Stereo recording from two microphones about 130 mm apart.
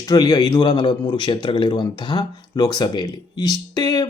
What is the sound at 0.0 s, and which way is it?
Speech, 30° left (ahead or behind).